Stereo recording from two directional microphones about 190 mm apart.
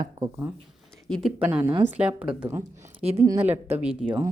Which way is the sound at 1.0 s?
5° left (ahead or behind).